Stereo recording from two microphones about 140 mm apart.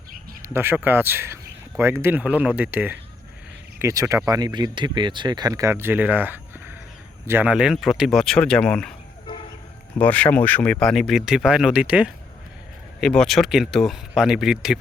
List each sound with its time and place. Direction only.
0.4 s speech: 15° right (ahead or behind); by 9.0 s 5° left (ahead or behind)
10.0 s speech: 10° left (ahead or behind); by 12.1 s 10° right (ahead or behind)
13.0 s speech: 5° left (ahead or behind)